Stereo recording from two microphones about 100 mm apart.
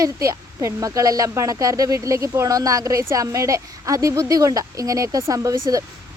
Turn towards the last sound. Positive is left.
turn(degrees=-35)  # may be behind; listen again after turning